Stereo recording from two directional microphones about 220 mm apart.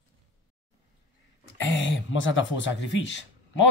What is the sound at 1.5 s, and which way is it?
Speech, 60° left (ahead or behind).